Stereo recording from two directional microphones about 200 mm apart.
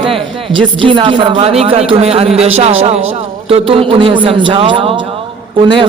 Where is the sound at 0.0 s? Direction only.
25° right (ahead or behind).